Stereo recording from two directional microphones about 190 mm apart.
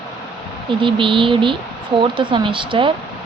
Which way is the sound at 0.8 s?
25° right (ahead or behind).